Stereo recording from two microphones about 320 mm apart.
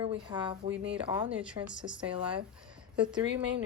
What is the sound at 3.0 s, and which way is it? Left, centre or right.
Speech, centre.